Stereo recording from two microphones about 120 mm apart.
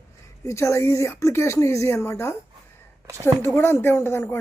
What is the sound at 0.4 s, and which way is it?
Speech, 25° left (ahead or behind).